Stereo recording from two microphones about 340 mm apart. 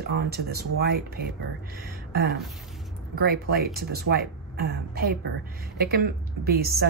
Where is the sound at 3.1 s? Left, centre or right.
Right.